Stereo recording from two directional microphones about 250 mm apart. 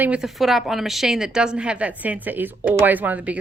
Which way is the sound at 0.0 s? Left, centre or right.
Centre.